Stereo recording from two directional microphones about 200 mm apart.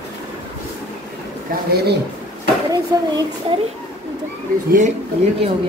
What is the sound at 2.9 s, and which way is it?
Speech, 15° right (ahead or behind).